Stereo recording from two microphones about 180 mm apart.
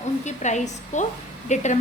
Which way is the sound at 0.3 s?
40° left (ahead or behind).